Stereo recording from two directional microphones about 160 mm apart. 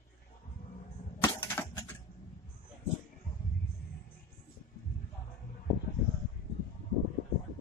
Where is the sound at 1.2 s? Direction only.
15° left (ahead or behind).